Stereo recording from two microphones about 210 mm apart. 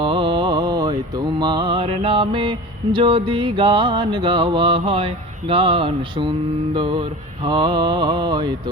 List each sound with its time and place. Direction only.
0.0 s mantra: 25° right (ahead or behind)